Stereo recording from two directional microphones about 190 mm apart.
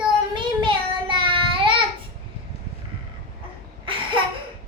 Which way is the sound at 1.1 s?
25° right (ahead or behind).